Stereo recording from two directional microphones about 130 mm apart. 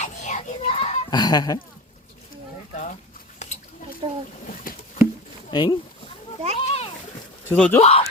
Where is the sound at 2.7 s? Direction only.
70° left (ahead or behind).